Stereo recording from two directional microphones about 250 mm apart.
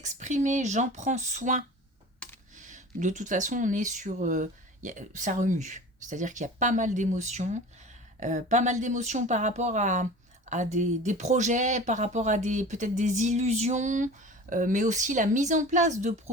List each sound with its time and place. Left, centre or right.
0.0 s speech: right